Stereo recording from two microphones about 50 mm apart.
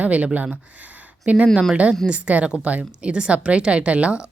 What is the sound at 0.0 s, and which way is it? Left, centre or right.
A woman's voice, right.